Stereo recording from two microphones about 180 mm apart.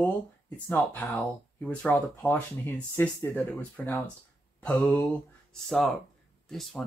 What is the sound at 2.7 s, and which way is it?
Speech, 10° left (ahead or behind).